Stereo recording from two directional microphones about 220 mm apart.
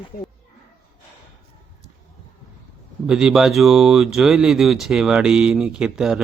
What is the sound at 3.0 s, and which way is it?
Speech, 5° right (ahead or behind).